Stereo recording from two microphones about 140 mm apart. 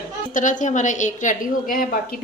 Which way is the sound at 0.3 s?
65° left (ahead or behind).